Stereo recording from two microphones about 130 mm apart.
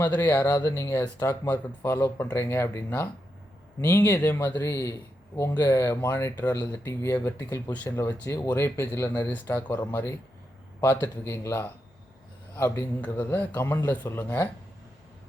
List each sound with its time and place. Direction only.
0.0 s speech: 15° left (ahead or behind)